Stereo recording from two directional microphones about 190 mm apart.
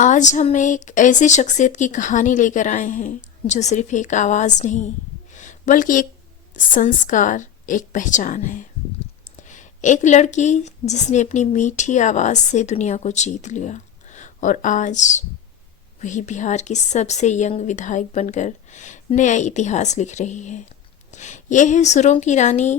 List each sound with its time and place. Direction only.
0.0 s a woman's voice: 40° left (ahead or behind)
5.3 s a sound: 40° left (ahead or behind)
6.7 s a woman's voice: 45° left (ahead or behind)